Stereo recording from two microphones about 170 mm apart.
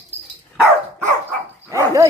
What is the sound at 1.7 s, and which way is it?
Dog, 20° right (ahead or behind).